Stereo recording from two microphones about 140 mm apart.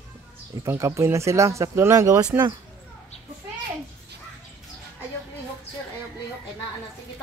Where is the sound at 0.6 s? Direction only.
20° right (ahead or behind).